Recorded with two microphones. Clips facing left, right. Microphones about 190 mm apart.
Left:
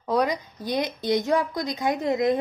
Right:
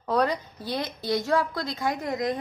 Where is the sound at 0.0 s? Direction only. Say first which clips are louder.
Left 1 dB; 10° left (ahead or behind).